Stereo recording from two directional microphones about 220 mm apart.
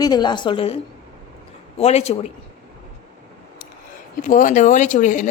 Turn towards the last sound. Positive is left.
turn(degrees=35)  # may be behind; listen again after turning